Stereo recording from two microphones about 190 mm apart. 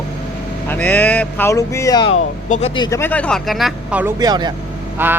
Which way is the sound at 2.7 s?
25° left (ahead or behind).